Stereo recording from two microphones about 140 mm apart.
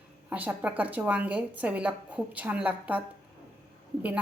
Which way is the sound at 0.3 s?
10° right (ahead or behind).